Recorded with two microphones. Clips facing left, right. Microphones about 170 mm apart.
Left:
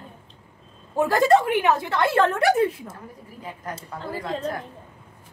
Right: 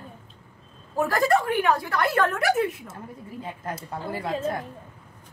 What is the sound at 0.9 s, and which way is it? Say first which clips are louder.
A woman's voice: left 4 dB; 25° left (ahead or behind).